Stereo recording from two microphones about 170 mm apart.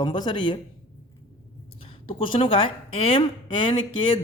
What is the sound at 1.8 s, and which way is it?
A woman's voice, 30° left (ahead or behind).